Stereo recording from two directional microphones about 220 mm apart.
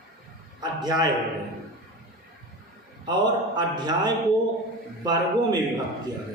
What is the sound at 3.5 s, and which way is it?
Speech, 20° right (ahead or behind).